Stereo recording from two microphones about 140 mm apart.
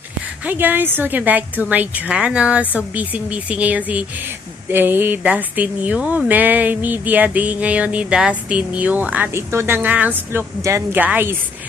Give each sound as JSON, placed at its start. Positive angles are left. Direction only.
{"t": 0.4, "sound": "speech", "side_deg": -15}